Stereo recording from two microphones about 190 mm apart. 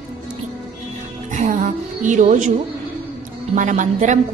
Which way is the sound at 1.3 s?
40° right (ahead or behind).